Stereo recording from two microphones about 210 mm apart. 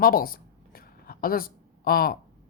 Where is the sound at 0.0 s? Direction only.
45° left (ahead or behind).